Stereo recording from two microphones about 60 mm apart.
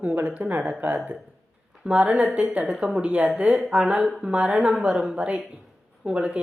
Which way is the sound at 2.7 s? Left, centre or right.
Centre.